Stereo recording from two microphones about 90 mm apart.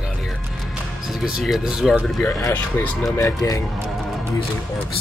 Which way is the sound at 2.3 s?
30° left (ahead or behind).